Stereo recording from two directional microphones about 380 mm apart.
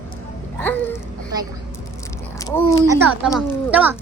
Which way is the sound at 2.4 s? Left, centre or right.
Centre.